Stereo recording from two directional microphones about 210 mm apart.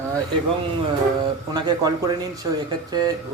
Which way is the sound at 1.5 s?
20° right (ahead or behind).